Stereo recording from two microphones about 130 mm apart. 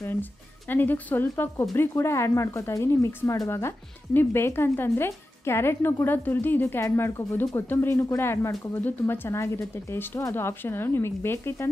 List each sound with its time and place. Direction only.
0.0 s a woman's voice: 15° left (ahead or behind)